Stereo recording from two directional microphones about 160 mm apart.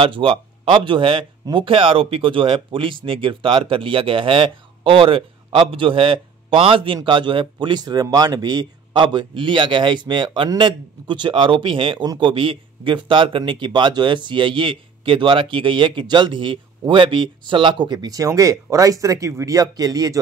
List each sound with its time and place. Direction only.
0.0 s speech: 35° right (ahead or behind)